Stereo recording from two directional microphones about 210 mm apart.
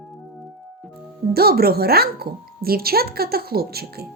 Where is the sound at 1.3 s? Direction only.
45° right (ahead or behind).